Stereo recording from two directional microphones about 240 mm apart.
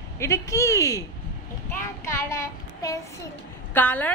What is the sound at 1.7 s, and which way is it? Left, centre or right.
Child singing, centre.